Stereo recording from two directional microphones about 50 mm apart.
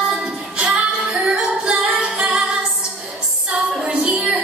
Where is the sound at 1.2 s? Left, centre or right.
Centre.